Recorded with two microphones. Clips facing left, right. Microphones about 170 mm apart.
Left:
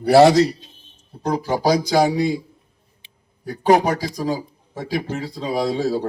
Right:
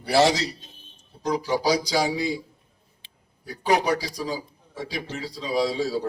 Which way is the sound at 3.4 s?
55° left (ahead or behind).